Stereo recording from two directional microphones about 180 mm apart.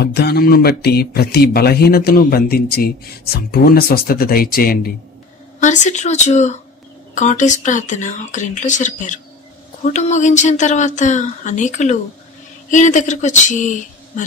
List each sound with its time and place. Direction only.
0.0 s speech: 65° left (ahead or behind)
5.6 s a woman's voice: 40° left (ahead or behind)